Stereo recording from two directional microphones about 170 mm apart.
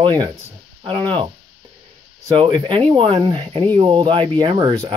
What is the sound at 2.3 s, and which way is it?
Speech, 30° right (ahead or behind).